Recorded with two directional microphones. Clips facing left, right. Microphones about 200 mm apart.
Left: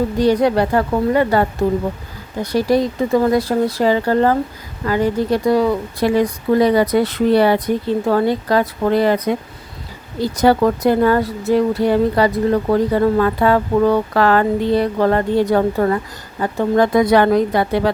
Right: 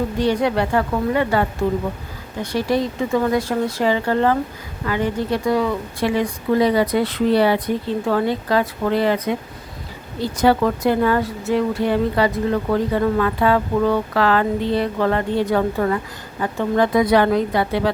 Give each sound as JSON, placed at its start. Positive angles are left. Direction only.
{"t": 0.2, "sound": "a woman's voice", "side_deg": 40}